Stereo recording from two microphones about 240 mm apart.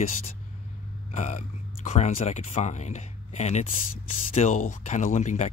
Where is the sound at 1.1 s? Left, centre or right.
Left.